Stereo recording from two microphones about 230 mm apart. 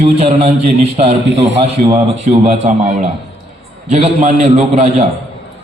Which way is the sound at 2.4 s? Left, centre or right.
Right.